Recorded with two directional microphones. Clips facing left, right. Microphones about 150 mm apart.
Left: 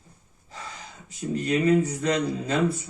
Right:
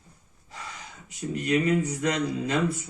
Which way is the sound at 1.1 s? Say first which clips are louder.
Left 1 dB; 35° left (ahead or behind).